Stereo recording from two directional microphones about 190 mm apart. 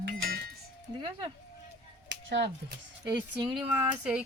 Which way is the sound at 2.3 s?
55° right (ahead or behind).